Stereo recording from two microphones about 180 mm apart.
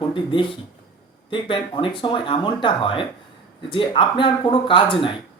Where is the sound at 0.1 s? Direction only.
25° left (ahead or behind).